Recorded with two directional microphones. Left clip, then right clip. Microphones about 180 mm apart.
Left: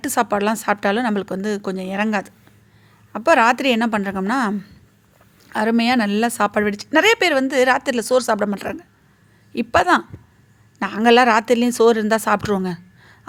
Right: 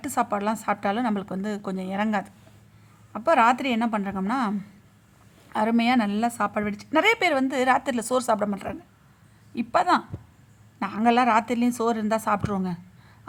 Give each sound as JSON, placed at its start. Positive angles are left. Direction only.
{"t": 0.0, "sound": "a woman's voice", "side_deg": 15}